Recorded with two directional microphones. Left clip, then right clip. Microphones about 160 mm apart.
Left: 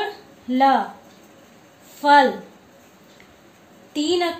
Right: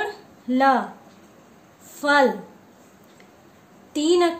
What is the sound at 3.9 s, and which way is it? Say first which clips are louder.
Speech: right 2 dB; 70° right (ahead or behind).